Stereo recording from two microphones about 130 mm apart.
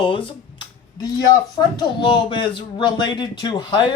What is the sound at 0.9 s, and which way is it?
A man's voice, 30° left (ahead or behind).